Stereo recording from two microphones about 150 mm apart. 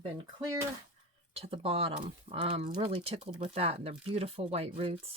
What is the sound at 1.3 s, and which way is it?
Speech, 40° right (ahead or behind).